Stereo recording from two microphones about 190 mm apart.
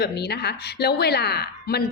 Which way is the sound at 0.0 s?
60° left (ahead or behind).